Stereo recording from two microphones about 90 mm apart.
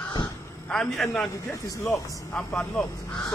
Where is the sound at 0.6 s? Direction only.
5° left (ahead or behind).